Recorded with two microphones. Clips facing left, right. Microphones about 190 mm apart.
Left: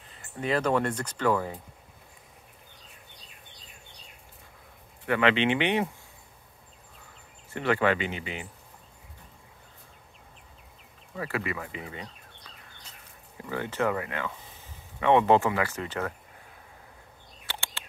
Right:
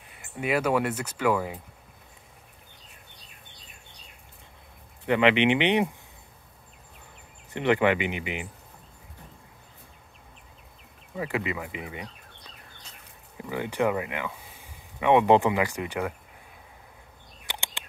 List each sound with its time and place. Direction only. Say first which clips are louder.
0.1 s speech: right 1 dB; 10° right (ahead or behind)
5.0 s speech: right 3 dB; 20° right (ahead or behind)
7.5 s speech: right 3 dB; 20° right (ahead or behind)
11.1 s speech: right 2 dB; 15° right (ahead or behind)
13.4 s speech: right 2 dB; 15° right (ahead or behind)
17.5 s a sound: right 1 dB; 15° right (ahead or behind)